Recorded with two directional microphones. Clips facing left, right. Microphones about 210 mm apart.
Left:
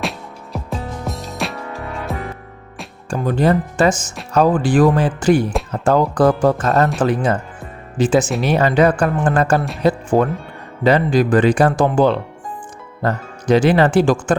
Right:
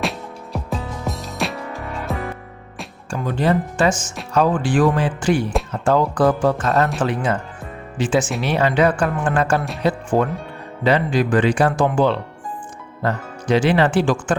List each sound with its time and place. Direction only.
0.0 s music: centre (ahead or behind)
3.1 s speech: 40° left (ahead or behind)